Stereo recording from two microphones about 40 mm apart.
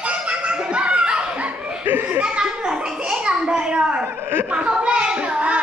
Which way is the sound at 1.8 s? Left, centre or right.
Right.